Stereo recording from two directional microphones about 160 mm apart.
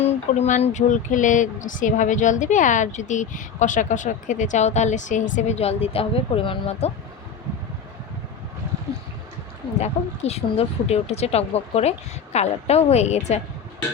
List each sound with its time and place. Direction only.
0.0 s speech: 40° left (ahead or behind)
9.7 s speech: 40° left (ahead or behind)